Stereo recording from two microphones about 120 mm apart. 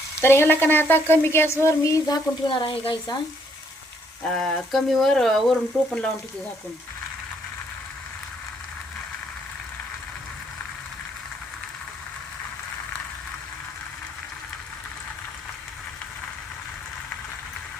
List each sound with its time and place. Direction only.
0.2 s speech: 20° left (ahead or behind); by 3.2 s 45° left (ahead or behind)
4.2 s speech: 5° left (ahead or behind)